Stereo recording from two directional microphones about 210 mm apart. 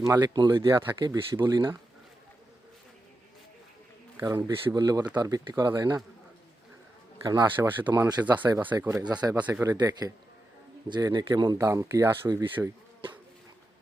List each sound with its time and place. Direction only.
0.1 s speech: 20° right (ahead or behind)
4.2 s speech: 15° right (ahead or behind)
7.3 s speech: 20° right (ahead or behind)